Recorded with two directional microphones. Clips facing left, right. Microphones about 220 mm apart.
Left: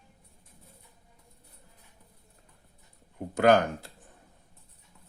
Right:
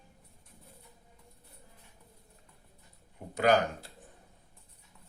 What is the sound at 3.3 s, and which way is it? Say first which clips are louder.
Speech: left 5 dB; 50° left (ahead or behind).